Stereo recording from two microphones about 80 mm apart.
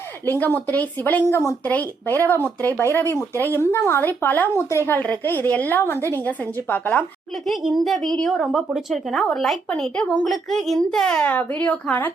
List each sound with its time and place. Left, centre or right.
0.3 s speech: left
1.3 s speech: left
1.6 s speech: centre
7.4 s speech: centre
9.6 s speech: centre
11.3 s speech: centre